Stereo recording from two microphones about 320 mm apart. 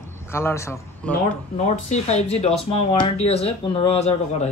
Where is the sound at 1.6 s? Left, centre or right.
Left.